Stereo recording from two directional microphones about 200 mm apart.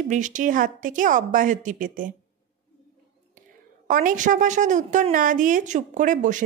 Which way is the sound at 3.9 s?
40° right (ahead or behind).